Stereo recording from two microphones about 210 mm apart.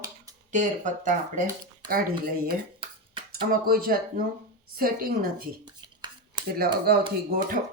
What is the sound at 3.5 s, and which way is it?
A woman's voice, 45° right (ahead or behind).